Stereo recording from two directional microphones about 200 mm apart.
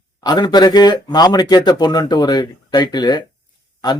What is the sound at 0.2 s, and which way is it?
Speech, 20° left (ahead or behind).